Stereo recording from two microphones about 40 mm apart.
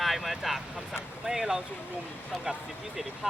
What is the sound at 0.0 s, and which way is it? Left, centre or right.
Vehicle, centre.